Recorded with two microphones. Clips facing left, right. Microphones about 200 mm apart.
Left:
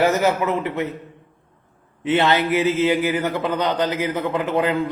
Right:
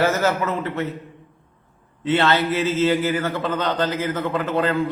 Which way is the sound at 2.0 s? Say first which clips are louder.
Left 1 dB; 15° left (ahead or behind).